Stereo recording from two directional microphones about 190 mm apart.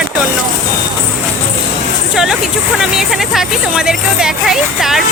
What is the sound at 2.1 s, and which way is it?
Speech, centre (ahead or behind).